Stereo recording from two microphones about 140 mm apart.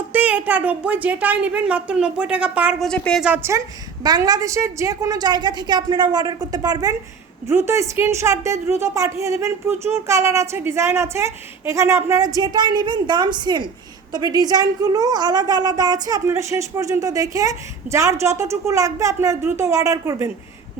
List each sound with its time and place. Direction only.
0.1 s a woman's voice: 10° right (ahead or behind)
2.8 s a woman's voice: 5° left (ahead or behind)
3.2 s a woman's voice: 10° right (ahead or behind)
4.0 s speech: 30° right (ahead or behind)